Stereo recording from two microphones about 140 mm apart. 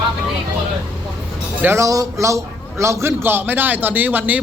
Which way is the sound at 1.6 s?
15° right (ahead or behind).